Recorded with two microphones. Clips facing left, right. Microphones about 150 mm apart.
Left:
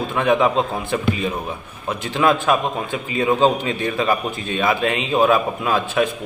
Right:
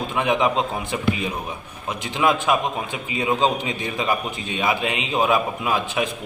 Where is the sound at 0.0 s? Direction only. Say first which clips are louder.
Left 3 dB; 15° right (ahead or behind).